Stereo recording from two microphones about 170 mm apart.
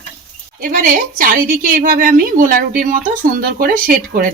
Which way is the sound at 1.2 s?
55° right (ahead or behind).